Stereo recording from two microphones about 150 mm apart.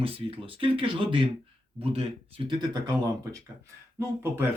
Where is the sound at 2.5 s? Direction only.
30° right (ahead or behind).